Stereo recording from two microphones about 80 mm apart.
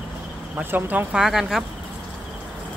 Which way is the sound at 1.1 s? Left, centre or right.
Centre.